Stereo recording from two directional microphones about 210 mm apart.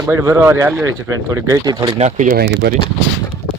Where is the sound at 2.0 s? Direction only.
40° right (ahead or behind).